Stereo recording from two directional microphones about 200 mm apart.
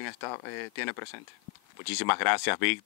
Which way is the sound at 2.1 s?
15° left (ahead or behind).